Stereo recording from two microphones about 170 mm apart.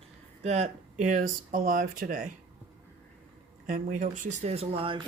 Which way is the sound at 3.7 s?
50° right (ahead or behind).